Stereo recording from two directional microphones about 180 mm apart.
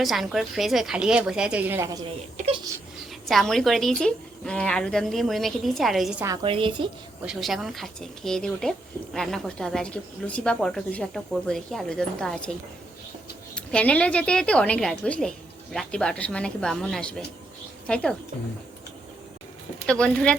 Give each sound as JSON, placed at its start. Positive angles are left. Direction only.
{"t": 0.0, "sound": "a woman's voice", "side_deg": 0}
{"t": 3.2, "sound": "a woman's voice", "side_deg": 0}
{"t": 6.2, "sound": "a woman's voice", "side_deg": -25}
{"t": 7.3, "sound": "a woman's voice", "side_deg": 0}
{"t": 13.6, "sound": "a woman's voice", "side_deg": 5}
{"t": 19.9, "sound": "a woman's voice", "side_deg": 5}